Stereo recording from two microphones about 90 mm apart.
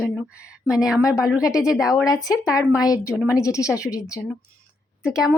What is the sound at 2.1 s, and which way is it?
A woman's voice, 45° left (ahead or behind).